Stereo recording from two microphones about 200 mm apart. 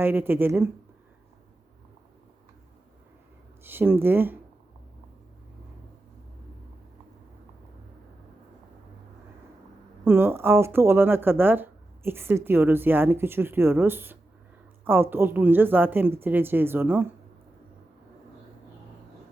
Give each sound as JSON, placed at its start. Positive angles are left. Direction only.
{"t": 0.0, "sound": "speech", "side_deg": -10}
{"t": 3.6, "sound": "speech", "side_deg": -10}
{"t": 10.0, "sound": "speech", "side_deg": -10}